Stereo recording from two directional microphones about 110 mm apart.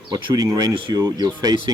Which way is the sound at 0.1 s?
35° right (ahead or behind).